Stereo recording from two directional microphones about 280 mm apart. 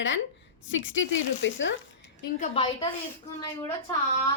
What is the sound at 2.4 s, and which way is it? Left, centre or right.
Speech, centre.